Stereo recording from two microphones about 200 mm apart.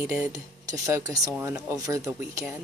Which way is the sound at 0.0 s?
5° right (ahead or behind).